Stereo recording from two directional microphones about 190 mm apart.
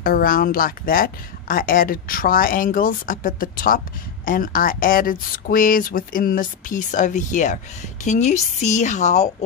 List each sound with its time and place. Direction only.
0.0 s a woman's voice: 50° left (ahead or behind)